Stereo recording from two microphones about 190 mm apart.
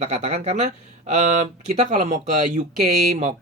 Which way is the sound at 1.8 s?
40° right (ahead or behind).